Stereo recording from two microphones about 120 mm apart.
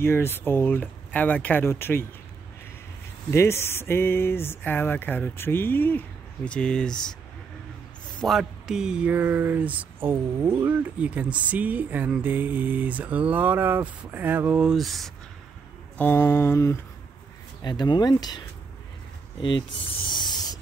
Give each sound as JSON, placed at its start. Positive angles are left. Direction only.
{"t": 0.0, "sound": "speech", "side_deg": 20}
{"t": 3.3, "sound": "speech", "side_deg": 20}
{"t": 8.2, "sound": "speech", "side_deg": 0}
{"t": 16.0, "sound": "speech", "side_deg": 15}
{"t": 17.6, "sound": "speech", "side_deg": 35}
{"t": 19.4, "sound": "speech", "side_deg": 45}